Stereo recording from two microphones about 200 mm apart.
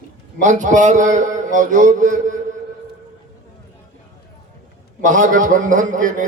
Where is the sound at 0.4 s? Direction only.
40° right (ahead or behind).